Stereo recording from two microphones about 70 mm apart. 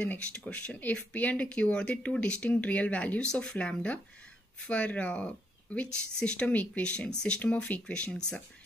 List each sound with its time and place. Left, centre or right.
0.0 s speech: centre